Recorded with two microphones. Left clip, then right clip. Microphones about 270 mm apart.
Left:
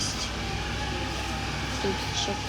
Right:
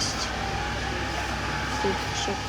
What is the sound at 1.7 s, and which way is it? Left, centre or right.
Speech, centre.